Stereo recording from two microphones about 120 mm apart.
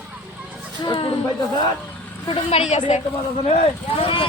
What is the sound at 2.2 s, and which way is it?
Speech, 55° left (ahead or behind).